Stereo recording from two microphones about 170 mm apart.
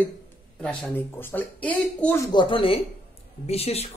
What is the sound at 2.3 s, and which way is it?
A woman's voice, 30° left (ahead or behind).